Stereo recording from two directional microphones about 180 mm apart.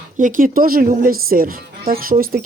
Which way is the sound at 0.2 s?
50° right (ahead or behind).